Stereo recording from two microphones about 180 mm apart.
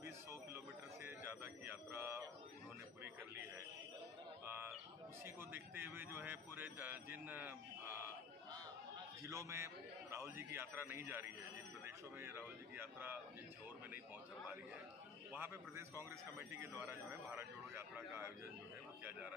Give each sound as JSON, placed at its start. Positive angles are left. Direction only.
{"t": 0.0, "sound": "a sound", "side_deg": -15}
{"t": 5.2, "sound": "a man's voice", "side_deg": -10}
{"t": 9.2, "sound": "a man's voice", "side_deg": -15}
{"t": 15.3, "sound": "a man's voice", "side_deg": -15}